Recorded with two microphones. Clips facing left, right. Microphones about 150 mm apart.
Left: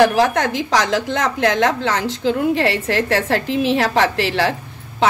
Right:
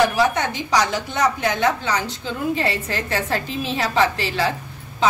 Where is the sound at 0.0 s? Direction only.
90° left.